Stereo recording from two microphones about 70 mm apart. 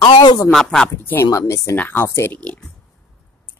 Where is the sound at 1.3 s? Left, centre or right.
Left.